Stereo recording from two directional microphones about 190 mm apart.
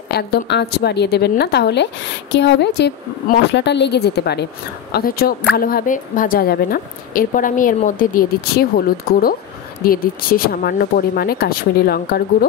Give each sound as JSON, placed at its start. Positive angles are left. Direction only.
{"t": 0.1, "sound": "a woman's voice", "side_deg": 55}